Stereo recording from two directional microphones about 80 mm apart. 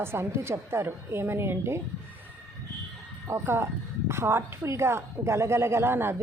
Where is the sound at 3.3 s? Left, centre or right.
Right.